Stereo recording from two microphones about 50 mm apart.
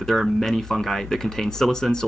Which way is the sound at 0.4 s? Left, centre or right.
Centre.